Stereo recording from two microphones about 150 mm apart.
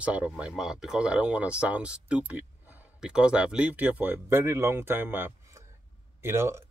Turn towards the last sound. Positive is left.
turn(degrees=-15)  # may be behind; listen again after turning